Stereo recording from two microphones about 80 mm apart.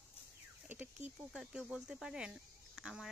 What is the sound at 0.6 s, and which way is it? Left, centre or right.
Speech, right.